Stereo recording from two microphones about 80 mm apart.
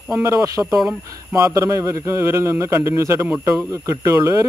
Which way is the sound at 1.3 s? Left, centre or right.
Right.